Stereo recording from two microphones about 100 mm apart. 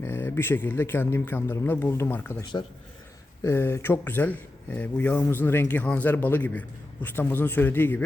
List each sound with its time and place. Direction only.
0.0 s a man's voice: 25° left (ahead or behind)
2.6 s a man's voice: 55° left (ahead or behind)
3.4 s a man's voice: 25° left (ahead or behind)